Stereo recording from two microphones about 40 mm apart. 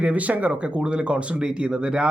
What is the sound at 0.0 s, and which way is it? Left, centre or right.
Speech, right.